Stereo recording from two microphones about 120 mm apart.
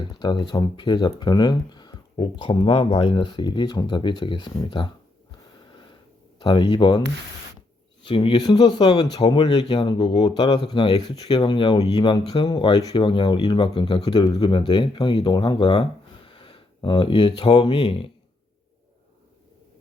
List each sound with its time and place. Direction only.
0.0 s speech: 40° left (ahead or behind)
6.4 s speech: 40° left (ahead or behind)
8.0 s speech: 45° left (ahead or behind)